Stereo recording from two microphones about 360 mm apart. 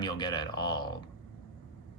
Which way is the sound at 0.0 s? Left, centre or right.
Centre.